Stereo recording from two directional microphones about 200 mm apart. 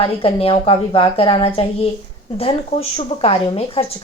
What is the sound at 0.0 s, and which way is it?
A woman's voice, 30° left (ahead or behind).